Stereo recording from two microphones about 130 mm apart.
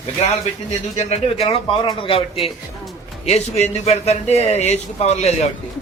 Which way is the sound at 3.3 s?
55° left (ahead or behind).